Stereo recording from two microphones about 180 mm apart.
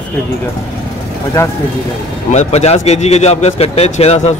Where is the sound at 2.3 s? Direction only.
40° left (ahead or behind).